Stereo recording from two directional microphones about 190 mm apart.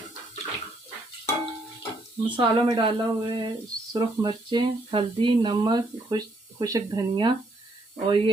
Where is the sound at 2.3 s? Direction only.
25° right (ahead or behind).